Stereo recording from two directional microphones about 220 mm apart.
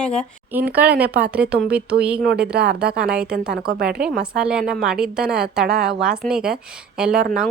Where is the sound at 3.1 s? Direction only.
5° right (ahead or behind).